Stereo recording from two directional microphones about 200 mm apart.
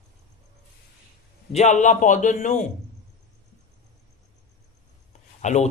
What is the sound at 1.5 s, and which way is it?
A man's voice, 35° left (ahead or behind).